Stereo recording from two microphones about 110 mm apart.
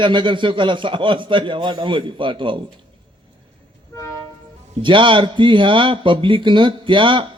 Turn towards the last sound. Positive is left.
turn(degrees=-50)  # may be behind; listen again after turning